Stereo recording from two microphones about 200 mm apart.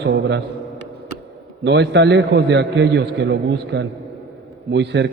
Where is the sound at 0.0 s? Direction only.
60° right (ahead or behind).